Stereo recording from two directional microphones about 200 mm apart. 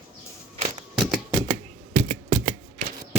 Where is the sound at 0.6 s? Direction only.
30° right (ahead or behind).